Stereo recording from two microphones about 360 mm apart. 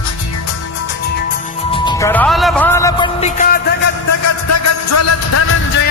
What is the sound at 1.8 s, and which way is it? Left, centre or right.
Music, centre.